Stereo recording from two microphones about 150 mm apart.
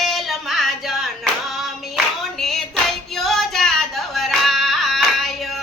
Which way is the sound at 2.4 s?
Centre (ahead or behind).